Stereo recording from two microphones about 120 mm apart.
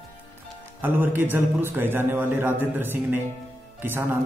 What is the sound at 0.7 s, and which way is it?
A man's voice, 15° right (ahead or behind).